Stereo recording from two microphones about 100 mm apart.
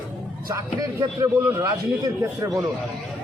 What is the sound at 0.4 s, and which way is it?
Speech, 35° right (ahead or behind).